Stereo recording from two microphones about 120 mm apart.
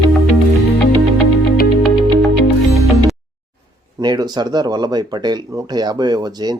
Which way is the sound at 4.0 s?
35° right (ahead or behind).